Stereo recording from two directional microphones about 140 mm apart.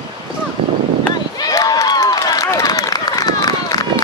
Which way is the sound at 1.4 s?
25° left (ahead or behind).